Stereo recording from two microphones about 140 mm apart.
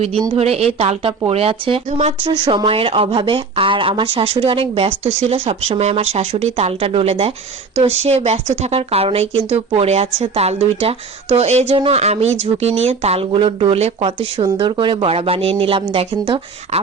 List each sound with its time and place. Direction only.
0.3 s speech: 45° right (ahead or behind)
2.3 s a woman's voice: 35° right (ahead or behind)
14.4 s a woman's voice: 35° right (ahead or behind)